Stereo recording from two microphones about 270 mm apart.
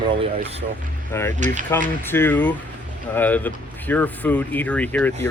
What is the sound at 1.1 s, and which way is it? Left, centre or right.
Speech, centre.